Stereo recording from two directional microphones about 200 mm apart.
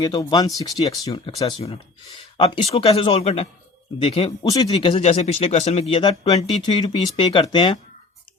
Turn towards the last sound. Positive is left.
turn(degrees=25)  # may be behind; listen again after turning